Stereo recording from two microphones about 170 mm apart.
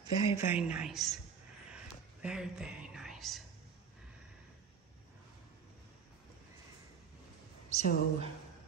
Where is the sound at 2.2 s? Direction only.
5° right (ahead or behind).